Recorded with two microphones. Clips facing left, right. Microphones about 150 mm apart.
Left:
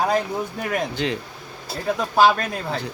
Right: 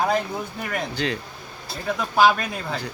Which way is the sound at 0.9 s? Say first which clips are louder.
Left 1 dB; 20° left (ahead or behind).